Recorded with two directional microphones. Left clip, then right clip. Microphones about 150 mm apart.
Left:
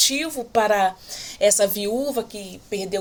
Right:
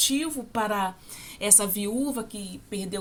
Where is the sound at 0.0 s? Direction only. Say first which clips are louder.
Left 5 dB; 10° right (ahead or behind).